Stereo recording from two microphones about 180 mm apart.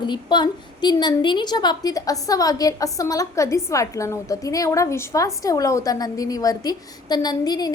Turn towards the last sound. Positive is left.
turn(degrees=20)  # may be behind; listen again after turning